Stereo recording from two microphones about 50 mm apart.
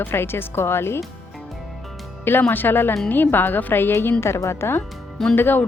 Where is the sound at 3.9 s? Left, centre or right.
Left.